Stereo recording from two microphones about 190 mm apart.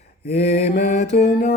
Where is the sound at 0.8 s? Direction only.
50° left (ahead or behind).